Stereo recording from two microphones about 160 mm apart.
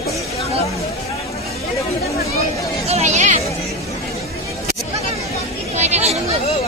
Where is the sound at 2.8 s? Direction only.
45° right (ahead or behind).